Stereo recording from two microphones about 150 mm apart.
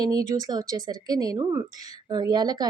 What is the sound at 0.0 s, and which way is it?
A woman's voice, 25° right (ahead or behind).